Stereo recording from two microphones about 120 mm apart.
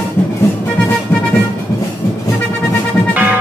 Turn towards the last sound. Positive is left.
turn(degrees=-15)  # may be behind; listen again after turning